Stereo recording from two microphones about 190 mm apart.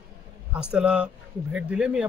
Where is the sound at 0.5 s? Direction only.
5° right (ahead or behind).